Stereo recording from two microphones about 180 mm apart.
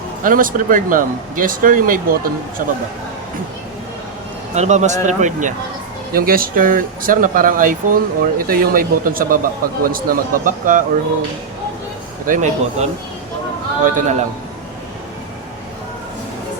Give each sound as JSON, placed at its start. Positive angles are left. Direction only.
{"t": 0.3, "sound": "speech", "side_deg": -50}
{"t": 4.5, "sound": "a man's voice", "side_deg": -40}
{"t": 6.1, "sound": "speech", "side_deg": -55}
{"t": 12.2, "sound": "speech", "side_deg": -45}